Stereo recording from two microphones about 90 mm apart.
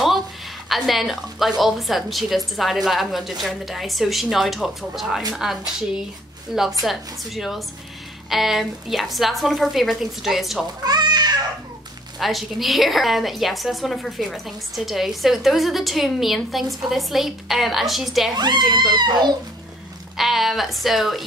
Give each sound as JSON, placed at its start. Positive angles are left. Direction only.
{"t": 0.7, "sound": "a woman's voice", "side_deg": 0}
{"t": 6.8, "sound": "a woman's voice", "side_deg": 0}
{"t": 10.8, "sound": "a sound", "side_deg": -50}
{"t": 12.2, "sound": "a woman's voice", "side_deg": 0}
{"t": 18.3, "sound": "speech", "side_deg": -55}
{"t": 20.2, "sound": "a woman's voice", "side_deg": 0}